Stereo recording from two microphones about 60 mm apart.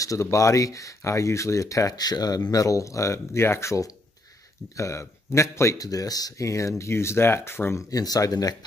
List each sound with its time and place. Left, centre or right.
0.0 s speech: left
5.8 s speech: left
6.8 s speech: left
7.9 s speech: left